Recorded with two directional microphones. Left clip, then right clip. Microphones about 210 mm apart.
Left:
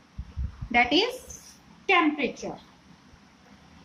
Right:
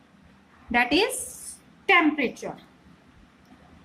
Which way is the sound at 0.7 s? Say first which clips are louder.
Even; 20° right (ahead or behind).